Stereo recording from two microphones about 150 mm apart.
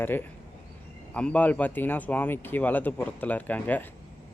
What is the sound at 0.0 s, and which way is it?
A man's voice, 15° left (ahead or behind).